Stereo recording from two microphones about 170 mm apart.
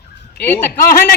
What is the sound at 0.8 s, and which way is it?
Speech, 65° left (ahead or behind).